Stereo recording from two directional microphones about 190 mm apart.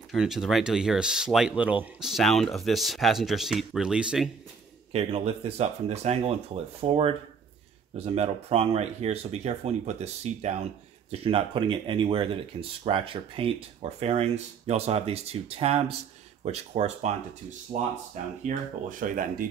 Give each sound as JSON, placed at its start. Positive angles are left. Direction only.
{"t": 0.1, "sound": "speech", "side_deg": 0}
{"t": 4.9, "sound": "speech", "side_deg": -35}
{"t": 18.4, "sound": "speech", "side_deg": -45}